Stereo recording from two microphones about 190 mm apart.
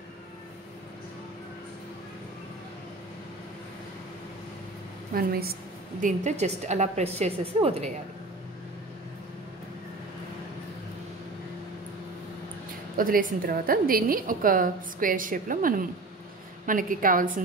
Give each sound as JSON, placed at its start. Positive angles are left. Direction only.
{"t": 5.1, "sound": "a woman's voice", "side_deg": -50}
{"t": 12.9, "sound": "a woman's voice", "side_deg": -50}